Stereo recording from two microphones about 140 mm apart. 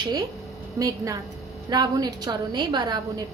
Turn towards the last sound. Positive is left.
turn(degrees=-30)  # may be behind; listen again after turning